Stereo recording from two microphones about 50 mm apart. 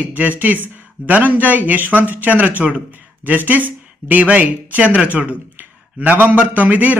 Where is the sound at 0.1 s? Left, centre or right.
Right.